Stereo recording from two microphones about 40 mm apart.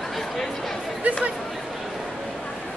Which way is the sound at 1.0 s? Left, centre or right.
Right.